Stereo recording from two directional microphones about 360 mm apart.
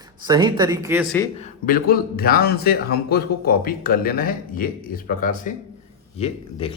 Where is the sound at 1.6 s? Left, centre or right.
Left.